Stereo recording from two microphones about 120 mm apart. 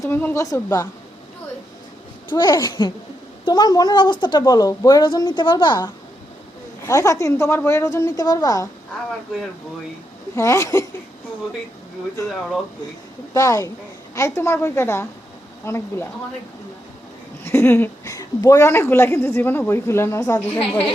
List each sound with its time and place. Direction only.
0.0 s a woman's voice: 20° left (ahead or behind)
2.3 s a woman's voice: 40° left (ahead or behind)
6.8 s a woman's voice: 25° left (ahead or behind)
10.3 s a woman's voice: 25° left (ahead or behind)
13.3 s a woman's voice: 25° left (ahead or behind)
17.4 s a woman's voice: 20° left (ahead or behind)
20.6 s a woman's voice: 55° left (ahead or behind)